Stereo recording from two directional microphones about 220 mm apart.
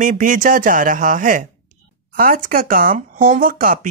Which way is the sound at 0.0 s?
35° right (ahead or behind).